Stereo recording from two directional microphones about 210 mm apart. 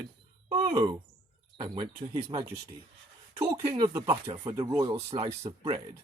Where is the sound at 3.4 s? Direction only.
15° right (ahead or behind).